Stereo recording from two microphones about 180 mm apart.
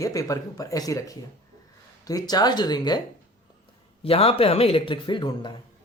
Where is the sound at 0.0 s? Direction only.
20° left (ahead or behind).